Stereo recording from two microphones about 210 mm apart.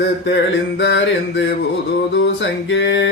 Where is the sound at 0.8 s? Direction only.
60° left (ahead or behind).